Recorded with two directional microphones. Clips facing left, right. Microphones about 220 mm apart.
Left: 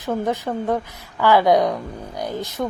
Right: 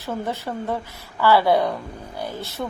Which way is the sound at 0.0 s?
15° left (ahead or behind).